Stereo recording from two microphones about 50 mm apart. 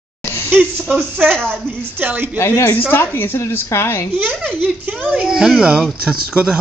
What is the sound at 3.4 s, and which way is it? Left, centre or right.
Speech, left.